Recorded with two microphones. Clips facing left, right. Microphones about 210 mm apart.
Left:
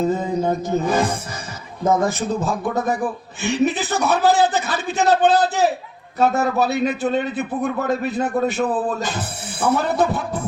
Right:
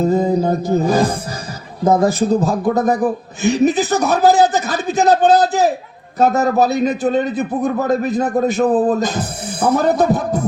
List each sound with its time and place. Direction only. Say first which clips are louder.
0.2 s a man's voice: right 5 dB; 35° right (ahead or behind)